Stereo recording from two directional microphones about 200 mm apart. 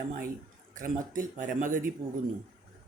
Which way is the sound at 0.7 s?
40° right (ahead or behind).